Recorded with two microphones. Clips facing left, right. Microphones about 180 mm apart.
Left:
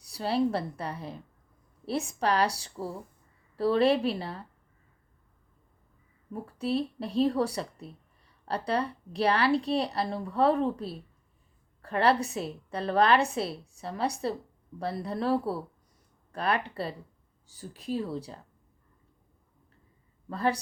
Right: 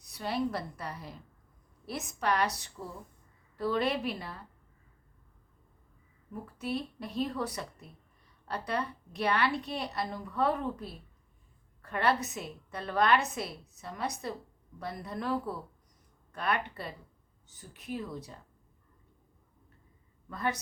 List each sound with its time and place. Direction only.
0.0 s a woman's voice: 30° left (ahead or behind)
6.3 s a woman's voice: 30° left (ahead or behind)
20.3 s a woman's voice: 30° left (ahead or behind)